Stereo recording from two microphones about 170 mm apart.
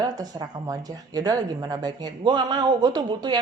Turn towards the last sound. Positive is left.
turn(degrees=-25)  # may be behind; listen again after turning